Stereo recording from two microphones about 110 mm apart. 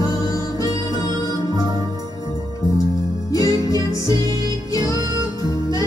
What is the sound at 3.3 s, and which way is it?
Music, 30° left (ahead or behind).